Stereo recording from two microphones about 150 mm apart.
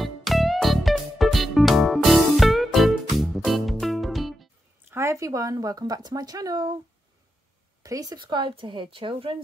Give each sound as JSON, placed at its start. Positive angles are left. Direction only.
{"t": 0.0, "sound": "music", "side_deg": 0}
{"t": 4.9, "sound": "speech", "side_deg": -20}
{"t": 7.8, "sound": "speech", "side_deg": -25}